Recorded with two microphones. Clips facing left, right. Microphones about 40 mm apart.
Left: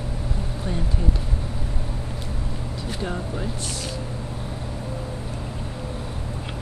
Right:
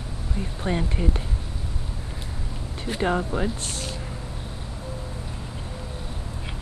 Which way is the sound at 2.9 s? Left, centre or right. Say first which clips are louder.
Right 7 dB; right.